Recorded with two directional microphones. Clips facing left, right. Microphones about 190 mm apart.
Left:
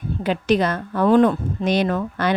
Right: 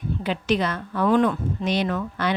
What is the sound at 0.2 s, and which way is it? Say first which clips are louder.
A woman's voice: left 5 dB; 45° left (ahead or behind).